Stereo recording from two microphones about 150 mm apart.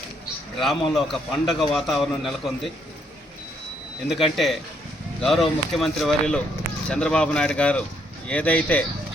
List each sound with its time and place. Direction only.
0.6 s a man's voice: centre (ahead or behind)
4.1 s a man's voice: centre (ahead or behind)